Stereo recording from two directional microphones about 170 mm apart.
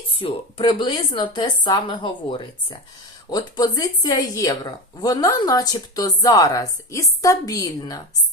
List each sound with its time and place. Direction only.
0.2 s a woman's voice: 30° left (ahead or behind)